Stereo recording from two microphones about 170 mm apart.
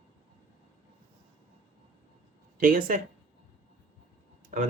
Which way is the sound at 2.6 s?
55° right (ahead or behind).